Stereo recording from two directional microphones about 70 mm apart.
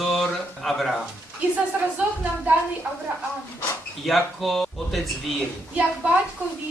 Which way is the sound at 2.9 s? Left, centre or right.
Centre.